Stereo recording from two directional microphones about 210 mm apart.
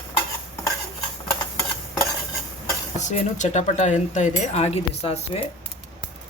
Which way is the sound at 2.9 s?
35° left (ahead or behind).